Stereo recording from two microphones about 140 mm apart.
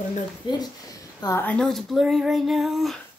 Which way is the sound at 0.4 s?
35° left (ahead or behind).